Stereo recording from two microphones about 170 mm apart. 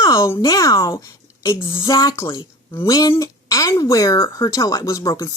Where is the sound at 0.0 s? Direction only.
20° left (ahead or behind).